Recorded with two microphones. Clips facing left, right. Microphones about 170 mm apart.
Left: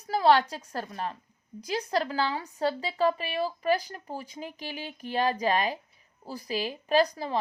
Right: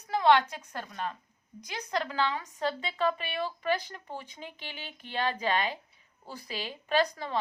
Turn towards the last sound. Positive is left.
turn(degrees=35)  # may be behind; listen again after turning